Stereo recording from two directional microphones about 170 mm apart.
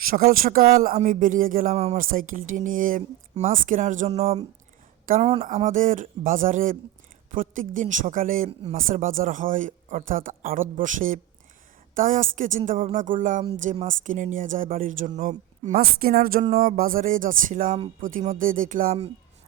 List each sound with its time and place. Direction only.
0.1 s speech: 60° right (ahead or behind)
1.7 s a sound: 40° right (ahead or behind)
2.0 s speech: 55° right (ahead or behind); by 4.4 s 35° right (ahead or behind)
5.2 s a sound: 35° right (ahead or behind)
5.6 s speech: 50° right (ahead or behind)
15.8 s speech: 60° right (ahead or behind)